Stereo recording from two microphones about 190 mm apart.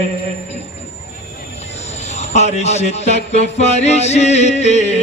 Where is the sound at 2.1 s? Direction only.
35° left (ahead or behind).